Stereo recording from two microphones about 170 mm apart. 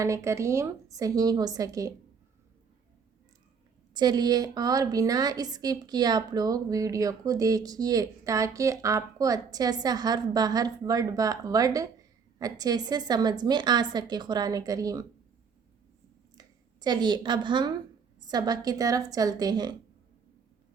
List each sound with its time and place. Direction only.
0.0 s a woman's voice: 20° right (ahead or behind)
3.9 s a woman's voice: 25° right (ahead or behind)
16.3 s a woman's voice: 25° right (ahead or behind)